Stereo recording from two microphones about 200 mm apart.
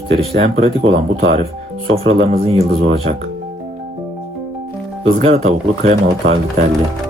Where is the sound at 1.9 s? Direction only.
30° right (ahead or behind).